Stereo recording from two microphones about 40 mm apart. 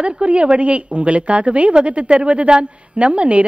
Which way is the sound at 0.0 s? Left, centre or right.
Right.